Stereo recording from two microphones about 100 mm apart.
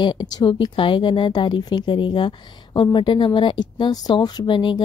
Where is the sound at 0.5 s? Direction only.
60° left (ahead or behind).